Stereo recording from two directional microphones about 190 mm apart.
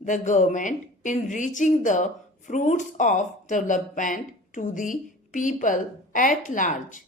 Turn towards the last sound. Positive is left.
turn(degrees=40)  # may be behind; listen again after turning